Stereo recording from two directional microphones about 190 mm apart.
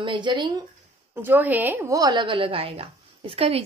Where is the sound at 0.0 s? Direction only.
25° right (ahead or behind).